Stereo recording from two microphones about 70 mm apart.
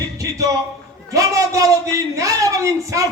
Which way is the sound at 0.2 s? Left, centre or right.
Right.